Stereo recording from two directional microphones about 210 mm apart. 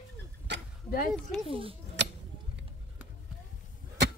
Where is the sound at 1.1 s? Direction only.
Centre (ahead or behind).